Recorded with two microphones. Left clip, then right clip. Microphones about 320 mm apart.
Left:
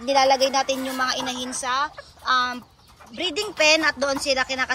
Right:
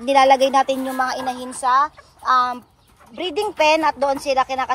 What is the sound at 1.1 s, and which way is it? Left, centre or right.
Speech, right.